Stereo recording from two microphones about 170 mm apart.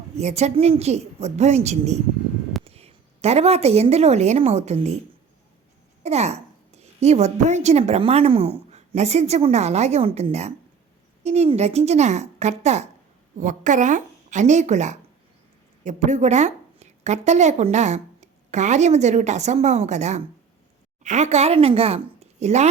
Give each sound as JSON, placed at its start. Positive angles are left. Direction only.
{"t": 0.2, "sound": "a woman's voice", "side_deg": -40}
{"t": 6.0, "sound": "a woman's voice", "side_deg": -40}